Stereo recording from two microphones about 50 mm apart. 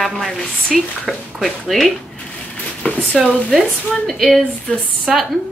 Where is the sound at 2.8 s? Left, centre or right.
Left.